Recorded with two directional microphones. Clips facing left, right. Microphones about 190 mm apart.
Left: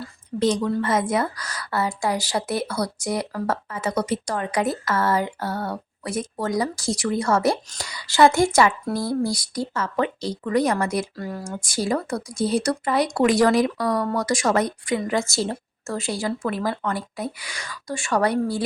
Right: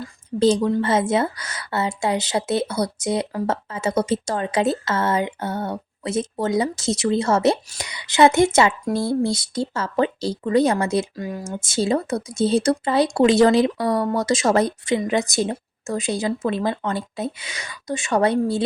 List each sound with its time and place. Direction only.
0.3 s speech: 30° right (ahead or behind)